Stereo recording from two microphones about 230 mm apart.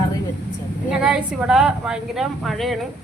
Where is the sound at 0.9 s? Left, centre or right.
Centre.